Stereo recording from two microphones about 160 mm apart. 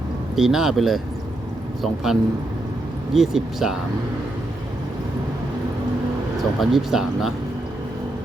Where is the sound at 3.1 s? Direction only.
Centre (ahead or behind).